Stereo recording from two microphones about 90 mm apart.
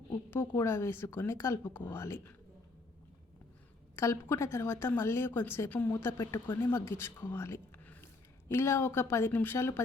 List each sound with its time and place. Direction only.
0.3 s speech: 25° left (ahead or behind)
3.9 s speech: 30° left (ahead or behind)